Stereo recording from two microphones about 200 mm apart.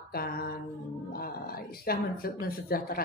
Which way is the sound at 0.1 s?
50° left (ahead or behind).